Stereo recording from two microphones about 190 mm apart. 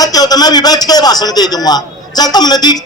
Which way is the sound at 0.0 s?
20° left (ahead or behind).